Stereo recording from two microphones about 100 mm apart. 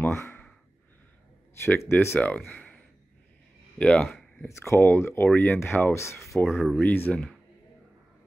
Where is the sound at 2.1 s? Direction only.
15° left (ahead or behind).